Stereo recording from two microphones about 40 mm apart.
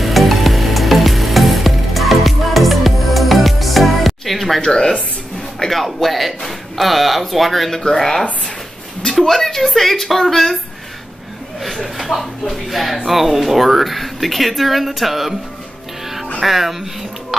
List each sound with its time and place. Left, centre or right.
0.0 s music: centre
4.6 s a woman's voice: centre
5.7 s a woman's voice: centre
11.6 s speech: centre
16.4 s speech: centre